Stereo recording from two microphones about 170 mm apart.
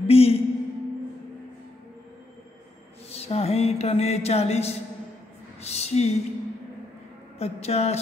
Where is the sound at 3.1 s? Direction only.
35° left (ahead or behind).